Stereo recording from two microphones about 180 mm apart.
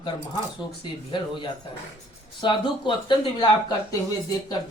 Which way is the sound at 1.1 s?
25° left (ahead or behind).